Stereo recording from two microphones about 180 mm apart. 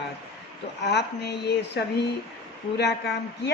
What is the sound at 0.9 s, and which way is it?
Speech, 70° left (ahead or behind).